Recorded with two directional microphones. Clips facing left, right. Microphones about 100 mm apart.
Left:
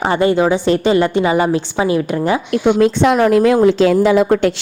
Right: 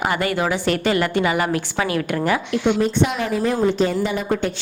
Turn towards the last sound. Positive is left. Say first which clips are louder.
# left 10 dB
turn(degrees=90)